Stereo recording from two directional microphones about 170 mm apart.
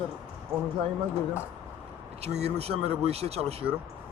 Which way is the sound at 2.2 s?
40° right (ahead or behind).